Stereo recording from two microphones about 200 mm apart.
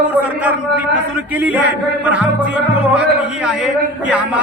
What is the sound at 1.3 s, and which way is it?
Music, 5° right (ahead or behind).